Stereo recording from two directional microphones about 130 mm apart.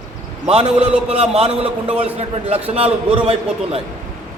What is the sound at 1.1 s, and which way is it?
A man's voice, 50° right (ahead or behind).